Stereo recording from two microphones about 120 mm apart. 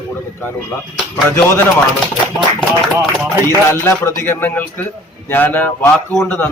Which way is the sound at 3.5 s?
25° left (ahead or behind).